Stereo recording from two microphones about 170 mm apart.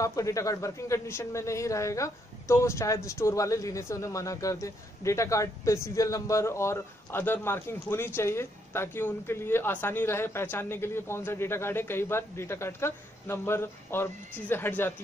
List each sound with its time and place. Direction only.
0.0 s speech: 20° left (ahead or behind)